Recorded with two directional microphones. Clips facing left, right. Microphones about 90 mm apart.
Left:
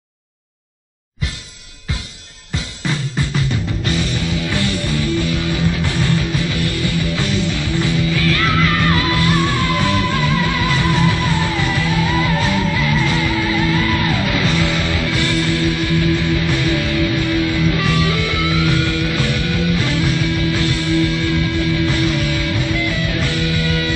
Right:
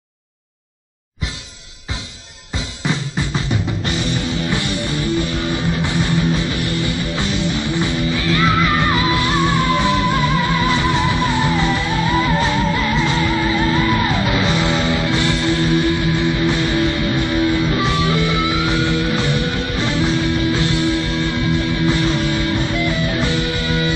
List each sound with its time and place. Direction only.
2.8 s music: 20° right (ahead or behind)